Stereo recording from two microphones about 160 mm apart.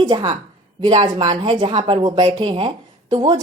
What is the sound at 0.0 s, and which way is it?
Speech, 25° right (ahead or behind).